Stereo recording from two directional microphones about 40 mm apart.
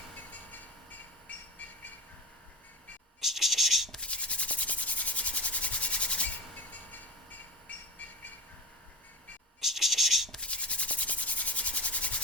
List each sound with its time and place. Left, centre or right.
0.3 s train: left
3.2 s scratch: centre
4.0 s rub: left
9.6 s scratch: centre
10.4 s rub: left